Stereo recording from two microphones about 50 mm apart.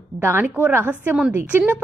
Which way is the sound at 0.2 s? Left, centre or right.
Right.